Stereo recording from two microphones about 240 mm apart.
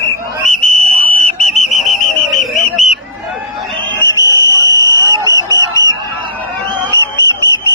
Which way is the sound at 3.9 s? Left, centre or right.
Centre.